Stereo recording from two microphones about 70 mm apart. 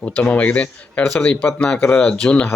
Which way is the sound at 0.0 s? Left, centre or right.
Centre.